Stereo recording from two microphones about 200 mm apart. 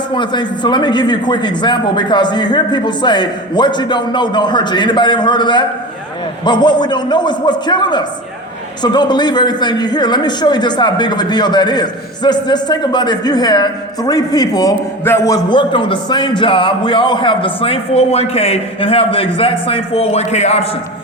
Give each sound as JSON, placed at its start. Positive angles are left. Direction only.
{"t": 0.1, "sound": "a man's voice", "side_deg": 20}